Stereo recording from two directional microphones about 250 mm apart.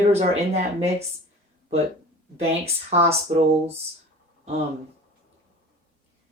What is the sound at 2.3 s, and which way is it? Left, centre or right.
Speech, right.